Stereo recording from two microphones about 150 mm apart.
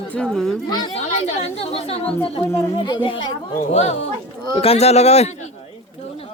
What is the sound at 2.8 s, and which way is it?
Speech, 35° left (ahead or behind).